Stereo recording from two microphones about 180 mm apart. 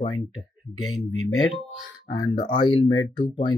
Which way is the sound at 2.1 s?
25° left (ahead or behind).